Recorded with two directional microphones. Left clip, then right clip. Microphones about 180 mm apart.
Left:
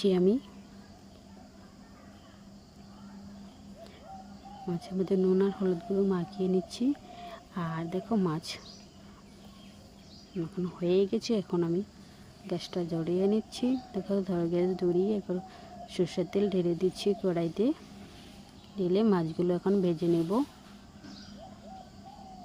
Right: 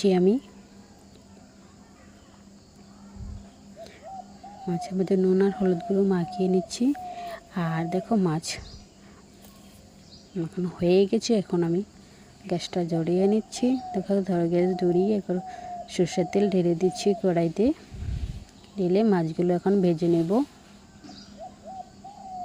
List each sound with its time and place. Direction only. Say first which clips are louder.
0.0 s speech: right 4 dB; 15° right (ahead or behind)
4.6 s speech: right 5 dB; 15° right (ahead or behind)
10.3 s speech: right 4 dB; 15° right (ahead or behind)
18.8 s speech: right 4 dB; 15° right (ahead or behind)